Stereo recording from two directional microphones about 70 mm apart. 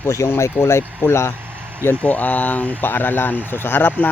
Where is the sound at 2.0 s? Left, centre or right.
Left.